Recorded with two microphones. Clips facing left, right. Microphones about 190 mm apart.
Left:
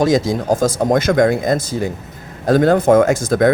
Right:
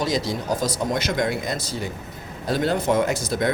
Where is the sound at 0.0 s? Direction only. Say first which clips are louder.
Left 9 dB; 50° left (ahead or behind).